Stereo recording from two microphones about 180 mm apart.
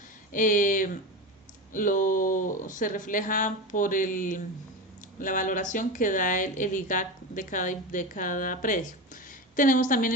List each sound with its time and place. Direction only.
0.3 s speech: 45° left (ahead or behind)